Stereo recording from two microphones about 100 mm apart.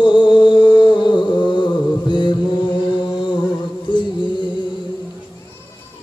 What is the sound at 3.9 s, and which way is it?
Music, 55° left (ahead or behind).